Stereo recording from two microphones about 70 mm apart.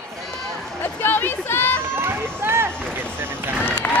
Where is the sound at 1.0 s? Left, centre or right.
Left.